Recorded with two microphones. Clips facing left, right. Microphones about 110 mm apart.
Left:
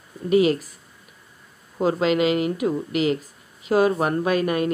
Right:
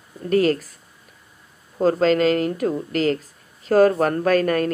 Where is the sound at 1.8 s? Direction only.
10° left (ahead or behind).